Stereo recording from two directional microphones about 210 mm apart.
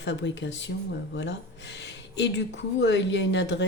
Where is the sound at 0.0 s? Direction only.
60° left (ahead or behind).